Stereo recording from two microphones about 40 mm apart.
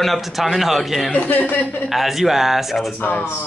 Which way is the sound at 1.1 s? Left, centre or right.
Left.